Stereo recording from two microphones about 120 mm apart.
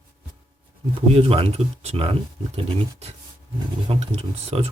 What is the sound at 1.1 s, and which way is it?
Speech, 50° right (ahead or behind).